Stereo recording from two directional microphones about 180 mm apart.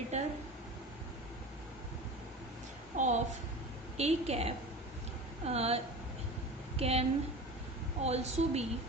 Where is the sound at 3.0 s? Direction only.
40° right (ahead or behind).